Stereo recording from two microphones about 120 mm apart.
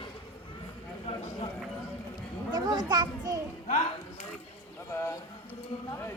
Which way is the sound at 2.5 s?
35° right (ahead or behind).